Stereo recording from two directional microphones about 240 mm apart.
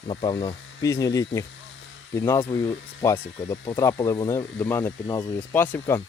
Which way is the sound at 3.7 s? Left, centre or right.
Centre.